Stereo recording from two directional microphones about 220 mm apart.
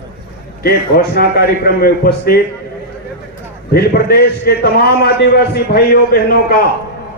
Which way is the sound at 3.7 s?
45° left (ahead or behind).